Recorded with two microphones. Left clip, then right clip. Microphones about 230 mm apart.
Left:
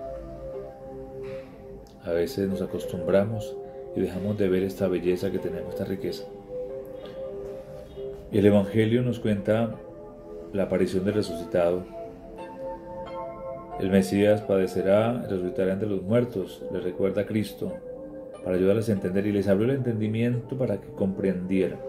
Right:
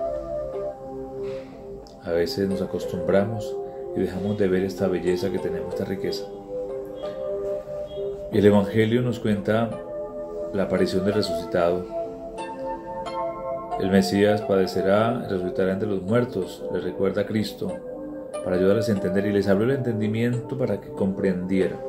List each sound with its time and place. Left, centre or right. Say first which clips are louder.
2.0 s speech: right 3 dB; centre
8.3 s speech: right 2 dB; centre
13.1 s music: right 8 dB; right
13.7 s speech: right 2 dB; centre
18.5 s speech: right 2 dB; centre